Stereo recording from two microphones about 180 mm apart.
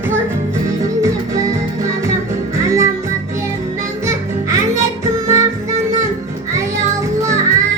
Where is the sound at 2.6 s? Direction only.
15° right (ahead or behind).